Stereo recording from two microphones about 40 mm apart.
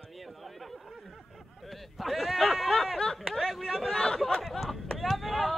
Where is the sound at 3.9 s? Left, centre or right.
Centre.